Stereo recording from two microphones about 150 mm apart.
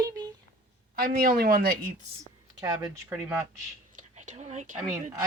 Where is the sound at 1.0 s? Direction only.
90° right.